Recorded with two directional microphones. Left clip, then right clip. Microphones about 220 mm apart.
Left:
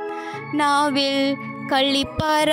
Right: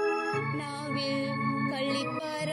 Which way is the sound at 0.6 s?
50° left (ahead or behind).